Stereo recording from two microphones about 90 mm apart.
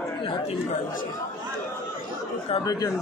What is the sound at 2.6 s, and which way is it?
Speech, 45° left (ahead or behind).